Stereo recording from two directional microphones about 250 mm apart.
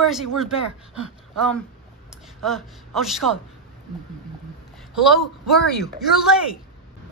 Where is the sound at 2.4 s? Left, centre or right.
Centre.